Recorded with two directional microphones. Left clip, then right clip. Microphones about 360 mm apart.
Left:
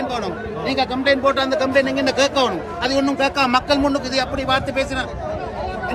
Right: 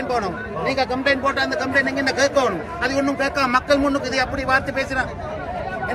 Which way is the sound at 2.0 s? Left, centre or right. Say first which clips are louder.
Left 1 dB; centre.